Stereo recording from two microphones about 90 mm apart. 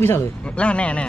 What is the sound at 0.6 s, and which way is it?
Speech, 15° left (ahead or behind).